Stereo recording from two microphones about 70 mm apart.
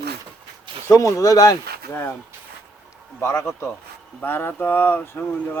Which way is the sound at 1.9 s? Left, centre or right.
Left.